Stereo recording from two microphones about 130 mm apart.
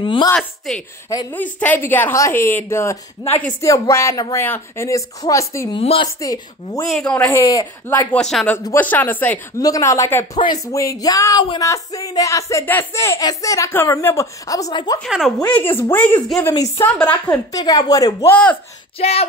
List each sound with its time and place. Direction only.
0.0 s speech: 40° left (ahead or behind)
0.4 s a woman's voice: 5° left (ahead or behind); by 5.7 s 25° left (ahead or behind)
5.7 s speech: 45° left (ahead or behind)
6.2 s speech: 25° left (ahead or behind)
6.9 s a woman's voice: 5° left (ahead or behind)
7.3 s speech: 25° left (ahead or behind)
8.2 s a woman's voice: 5° left (ahead or behind)
9.6 s speech: 25° left (ahead or behind)
15.0 s a woman's voice: centre (ahead or behind); by 16.7 s 25° left (ahead or behind)
16.8 s a woman's voice: 10° left (ahead or behind)
17.5 s speech: 30° left (ahead or behind)
18.9 s speech: 50° left (ahead or behind)